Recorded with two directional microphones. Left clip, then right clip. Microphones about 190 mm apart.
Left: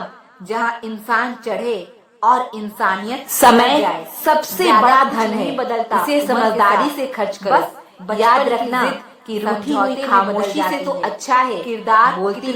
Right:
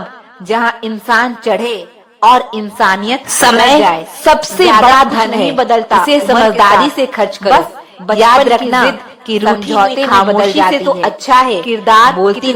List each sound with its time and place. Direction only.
0.4 s a woman's voice: 30° right (ahead or behind)